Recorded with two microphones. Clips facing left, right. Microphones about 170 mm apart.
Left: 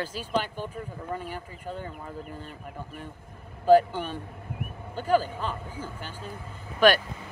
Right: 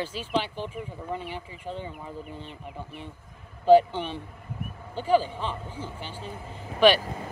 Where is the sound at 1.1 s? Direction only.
45° left (ahead or behind).